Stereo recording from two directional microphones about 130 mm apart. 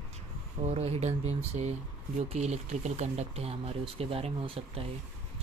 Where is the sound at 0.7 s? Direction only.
55° right (ahead or behind).